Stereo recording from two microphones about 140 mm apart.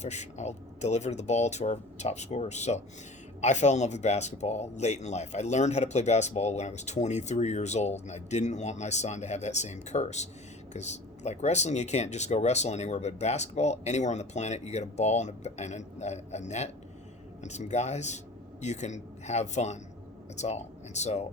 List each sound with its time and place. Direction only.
0.0 s speech: 55° left (ahead or behind)